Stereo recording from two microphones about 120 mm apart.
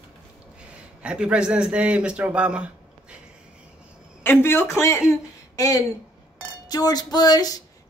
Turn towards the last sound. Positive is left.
turn(degrees=35)  # may be behind; listen again after turning